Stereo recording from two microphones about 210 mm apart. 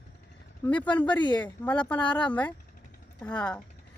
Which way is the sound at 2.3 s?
5° left (ahead or behind).